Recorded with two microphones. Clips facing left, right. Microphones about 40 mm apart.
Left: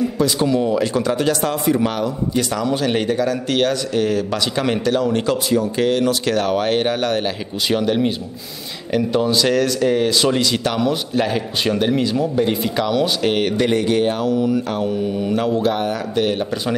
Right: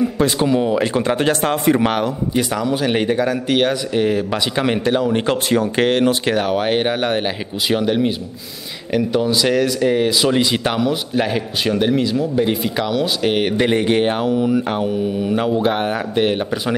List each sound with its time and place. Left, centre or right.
0.4 s speech: right
2.3 s a man's voice: centre
5.2 s speech: right
6.0 s speech: right
6.4 s a man's voice: centre
10.8 s a man's voice: centre; by 14.3 s right
14.3 s a man's voice: centre
15.7 s speech: right